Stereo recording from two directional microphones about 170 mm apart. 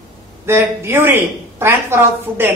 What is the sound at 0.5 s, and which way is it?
A woman's voice, 15° right (ahead or behind).